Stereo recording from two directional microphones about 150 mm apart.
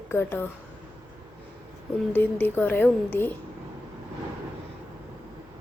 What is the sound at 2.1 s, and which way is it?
A woman's voice, 10° left (ahead or behind).